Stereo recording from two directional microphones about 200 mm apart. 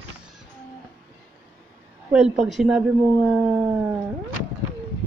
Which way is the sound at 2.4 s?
Centre (ahead or behind).